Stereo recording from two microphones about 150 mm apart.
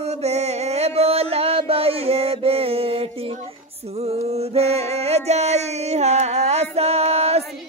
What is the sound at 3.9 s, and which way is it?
Music, 45° right (ahead or behind).